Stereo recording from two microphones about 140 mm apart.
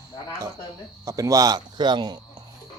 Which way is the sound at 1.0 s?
25° right (ahead or behind).